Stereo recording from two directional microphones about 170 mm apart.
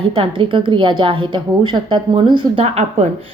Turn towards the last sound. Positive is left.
turn(degrees=-35)  # may be behind; listen again after turning